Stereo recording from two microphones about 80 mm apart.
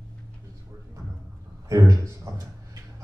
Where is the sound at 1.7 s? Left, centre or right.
Right.